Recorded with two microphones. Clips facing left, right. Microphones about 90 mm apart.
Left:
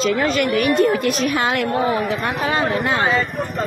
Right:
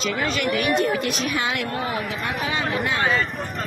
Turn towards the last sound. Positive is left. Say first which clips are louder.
# left 5 dB
turn(degrees=45)  # may be behind; listen again after turning